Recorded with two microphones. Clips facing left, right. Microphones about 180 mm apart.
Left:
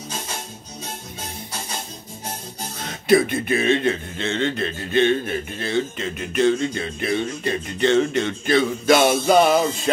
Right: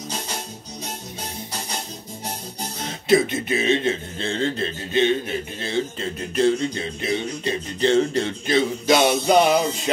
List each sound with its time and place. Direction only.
2.8 s speech: 25° right (ahead or behind)
6.7 s speech: 20° right (ahead or behind)
7.9 s speech: 35° right (ahead or behind)
8.5 s speech: 20° right (ahead or behind)